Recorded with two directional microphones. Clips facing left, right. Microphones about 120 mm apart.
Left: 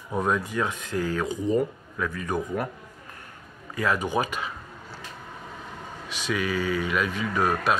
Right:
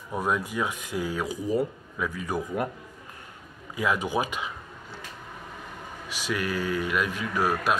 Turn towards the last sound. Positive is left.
turn(degrees=-10)  # may be behind; listen again after turning